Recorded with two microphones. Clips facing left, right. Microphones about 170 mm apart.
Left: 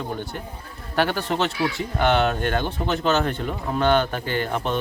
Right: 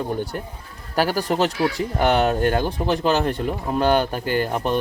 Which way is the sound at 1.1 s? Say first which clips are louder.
Right 3 dB; 40° right (ahead or behind).